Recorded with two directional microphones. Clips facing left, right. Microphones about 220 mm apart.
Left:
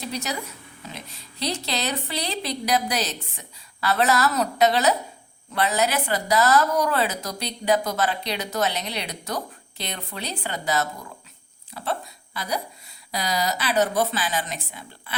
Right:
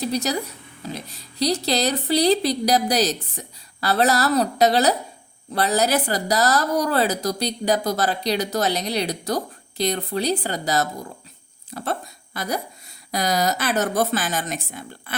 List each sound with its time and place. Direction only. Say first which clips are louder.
0.0 s a woman's voice: right 6 dB; 35° right (ahead or behind)